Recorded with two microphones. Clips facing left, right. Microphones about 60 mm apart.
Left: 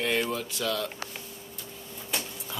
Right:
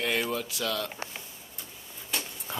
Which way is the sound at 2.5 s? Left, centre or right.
Right.